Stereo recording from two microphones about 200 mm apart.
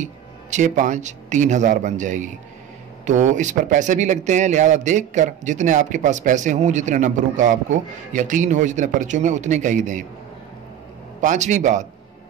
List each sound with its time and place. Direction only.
0.0 s speech: 35° right (ahead or behind)
11.1 s speech: 35° right (ahead or behind)